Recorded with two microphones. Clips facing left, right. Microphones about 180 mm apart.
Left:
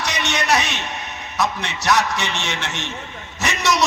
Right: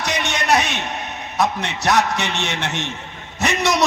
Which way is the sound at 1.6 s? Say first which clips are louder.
Right 1 dB; 55° right (ahead or behind).